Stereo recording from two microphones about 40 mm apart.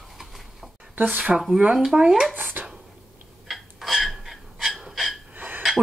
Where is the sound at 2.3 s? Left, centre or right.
Right.